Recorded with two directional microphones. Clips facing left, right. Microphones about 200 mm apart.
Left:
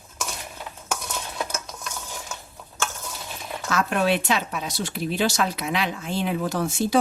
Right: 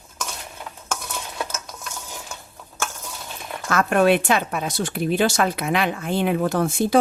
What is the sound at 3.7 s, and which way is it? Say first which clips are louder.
A woman's voice: right 5 dB; 50° right (ahead or behind).